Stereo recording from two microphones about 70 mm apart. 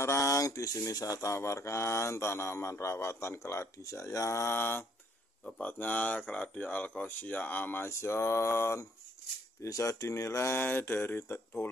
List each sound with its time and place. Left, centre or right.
0.0 s speech: left
5.6 s speech: left